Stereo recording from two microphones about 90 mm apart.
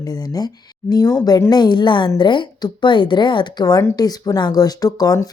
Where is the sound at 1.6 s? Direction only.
55° left (ahead or behind).